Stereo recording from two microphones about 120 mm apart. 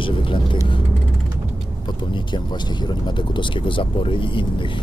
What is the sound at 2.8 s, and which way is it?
Speech, 40° left (ahead or behind).